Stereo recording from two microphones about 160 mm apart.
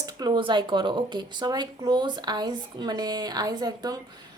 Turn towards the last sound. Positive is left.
turn(degrees=-25)  # may be behind; listen again after turning